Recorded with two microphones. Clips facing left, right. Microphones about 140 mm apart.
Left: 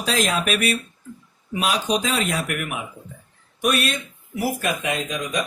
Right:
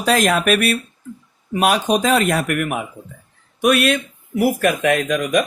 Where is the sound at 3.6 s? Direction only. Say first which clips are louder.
Right 7 dB; 60° right (ahead or behind).